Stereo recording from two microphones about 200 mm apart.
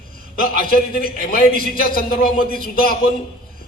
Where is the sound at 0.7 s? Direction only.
45° left (ahead or behind).